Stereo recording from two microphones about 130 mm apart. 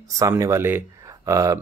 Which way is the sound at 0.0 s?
25° right (ahead or behind).